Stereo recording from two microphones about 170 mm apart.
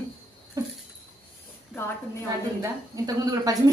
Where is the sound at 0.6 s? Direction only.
20° right (ahead or behind).